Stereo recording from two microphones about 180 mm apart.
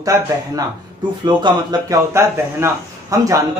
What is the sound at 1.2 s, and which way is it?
Speech, 20° right (ahead or behind).